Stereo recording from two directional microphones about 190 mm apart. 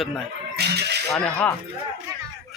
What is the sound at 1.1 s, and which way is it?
Speech, 5° left (ahead or behind).